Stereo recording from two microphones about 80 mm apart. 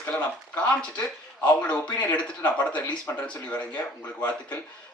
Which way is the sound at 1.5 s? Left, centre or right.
Centre.